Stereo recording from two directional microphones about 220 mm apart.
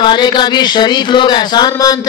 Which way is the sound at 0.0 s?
20° left (ahead or behind).